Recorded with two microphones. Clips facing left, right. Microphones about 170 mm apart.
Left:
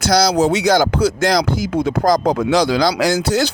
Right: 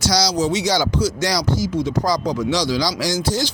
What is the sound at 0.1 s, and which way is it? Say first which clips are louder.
Speech: left 7 dB; 55° left (ahead or behind).